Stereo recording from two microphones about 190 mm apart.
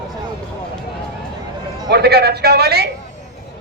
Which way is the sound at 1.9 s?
55° right (ahead or behind).